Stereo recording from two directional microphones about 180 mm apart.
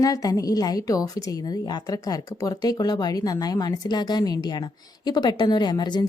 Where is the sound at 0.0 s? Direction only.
20° left (ahead or behind).